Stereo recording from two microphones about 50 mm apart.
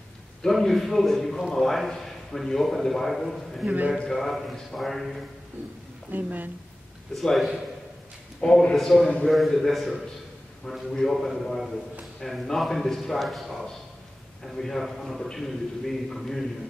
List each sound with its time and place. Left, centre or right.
0.5 s a man's voice: centre
3.6 s a man's voice: right
4.1 s a man's voice: centre
6.1 s a woman's voice: right
7.2 s a man's voice: centre
8.4 s a man's voice: left
8.7 s a man's voice: centre